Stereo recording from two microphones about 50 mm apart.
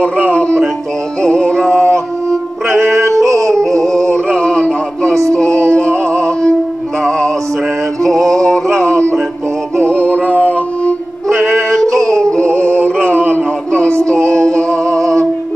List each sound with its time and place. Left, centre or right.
0.3 s music: left
1.7 s music: right
3.0 s music: right
4.1 s music: centre
7.0 s male singing: centre
8.0 s music: centre
8.7 s music: right
9.8 s music: left
10.2 s a sound: right
11.2 s music: centre
14.7 s music: right